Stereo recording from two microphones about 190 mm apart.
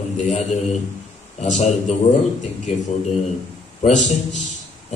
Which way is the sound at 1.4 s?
35° left (ahead or behind).